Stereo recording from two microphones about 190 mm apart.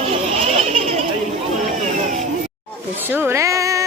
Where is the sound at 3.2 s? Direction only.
15° right (ahead or behind).